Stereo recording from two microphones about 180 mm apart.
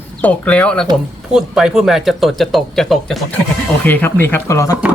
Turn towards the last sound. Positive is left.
turn(degrees=15)  # may be behind; listen again after turning